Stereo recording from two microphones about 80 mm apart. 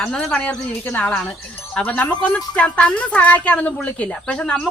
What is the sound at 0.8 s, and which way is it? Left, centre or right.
A woman's voice, left.